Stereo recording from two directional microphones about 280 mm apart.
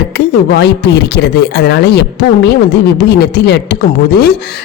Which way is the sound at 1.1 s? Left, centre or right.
Left.